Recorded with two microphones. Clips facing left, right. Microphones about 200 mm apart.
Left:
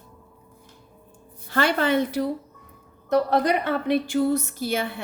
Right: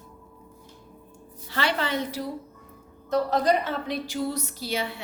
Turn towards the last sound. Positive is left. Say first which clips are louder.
# left 4 dB
turn(degrees=50)  # may be behind; listen again after turning